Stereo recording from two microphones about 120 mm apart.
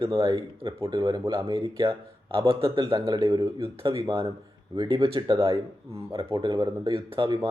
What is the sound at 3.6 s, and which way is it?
A man's voice, 50° right (ahead or behind).